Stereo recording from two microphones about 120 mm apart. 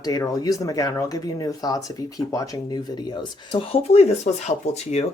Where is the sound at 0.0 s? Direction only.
30° left (ahead or behind).